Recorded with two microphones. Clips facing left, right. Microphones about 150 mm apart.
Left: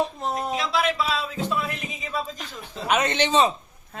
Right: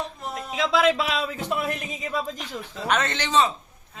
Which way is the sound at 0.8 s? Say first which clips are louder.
Right 4 dB; 90° right.